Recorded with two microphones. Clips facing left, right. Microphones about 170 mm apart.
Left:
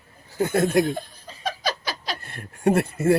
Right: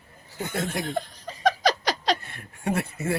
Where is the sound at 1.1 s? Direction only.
75° right (ahead or behind).